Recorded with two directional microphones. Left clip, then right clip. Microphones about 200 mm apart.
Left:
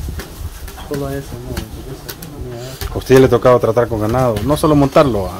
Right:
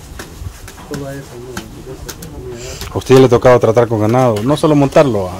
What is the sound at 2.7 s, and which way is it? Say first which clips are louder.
Speech: right 2 dB; 20° right (ahead or behind).